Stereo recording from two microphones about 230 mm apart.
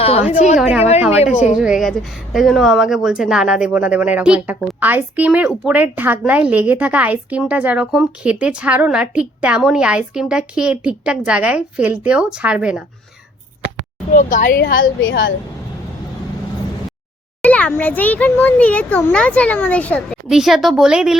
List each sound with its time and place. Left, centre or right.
0.0 s a sound: left
1.5 s speech: centre
14.1 s a woman's voice: left
15.0 s a woman's voice: left
17.4 s speech: centre